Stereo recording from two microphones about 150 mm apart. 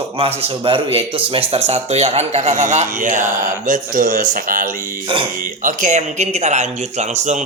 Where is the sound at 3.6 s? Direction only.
60° right (ahead or behind).